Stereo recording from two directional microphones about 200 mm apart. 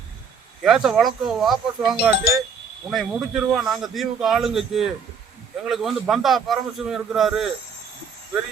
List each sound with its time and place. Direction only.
0.6 s a man's voice: centre (ahead or behind)